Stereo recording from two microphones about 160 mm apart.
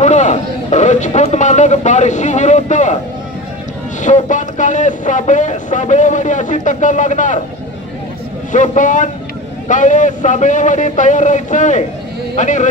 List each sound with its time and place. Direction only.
0.0 s speech: 45° left (ahead or behind)
4.0 s speech: 50° left (ahead or behind)
8.5 s speech: 50° left (ahead or behind)